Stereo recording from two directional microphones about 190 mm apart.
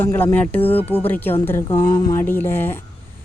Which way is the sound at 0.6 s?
30° left (ahead or behind).